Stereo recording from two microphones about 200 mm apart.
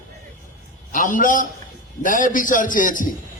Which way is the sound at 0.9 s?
40° left (ahead or behind).